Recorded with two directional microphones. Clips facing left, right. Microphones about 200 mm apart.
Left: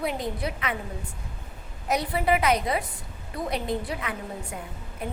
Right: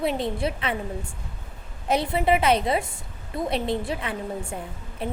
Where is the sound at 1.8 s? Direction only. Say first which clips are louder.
Right 3 dB; 25° right (ahead or behind).